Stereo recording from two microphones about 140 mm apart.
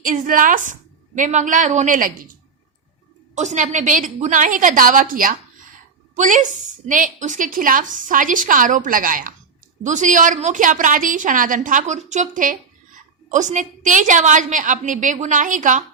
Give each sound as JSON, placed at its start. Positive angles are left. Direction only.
{"t": 0.0, "sound": "a woman's voice", "side_deg": -80}
{"t": 3.3, "sound": "a woman's voice", "side_deg": -55}
{"t": 6.1, "sound": "a woman's voice", "side_deg": -60}
{"t": 9.8, "sound": "a woman's voice", "side_deg": -60}